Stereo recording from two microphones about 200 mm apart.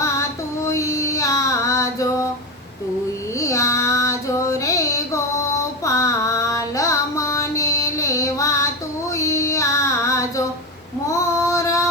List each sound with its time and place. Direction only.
0.0 s child singing: 15° left (ahead or behind)
3.3 s child singing: 15° left (ahead or behind)
5.5 s female singing: 15° left (ahead or behind)